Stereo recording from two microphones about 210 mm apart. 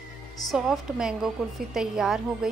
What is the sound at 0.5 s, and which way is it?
A woman's voice, centre (ahead or behind).